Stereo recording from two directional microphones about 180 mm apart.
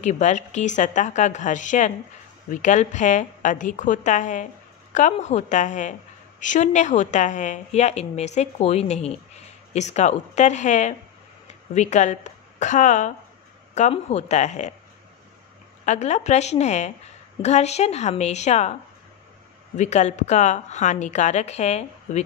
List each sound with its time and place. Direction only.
0.0 s a woman's voice: 40° left (ahead or behind)
15.8 s a woman's voice: 40° left (ahead or behind)
19.8 s a woman's voice: 40° left (ahead or behind)